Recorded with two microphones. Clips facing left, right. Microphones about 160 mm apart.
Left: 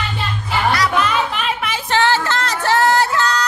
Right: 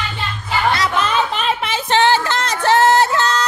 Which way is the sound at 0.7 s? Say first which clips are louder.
Left 2 dB; 25° right (ahead or behind).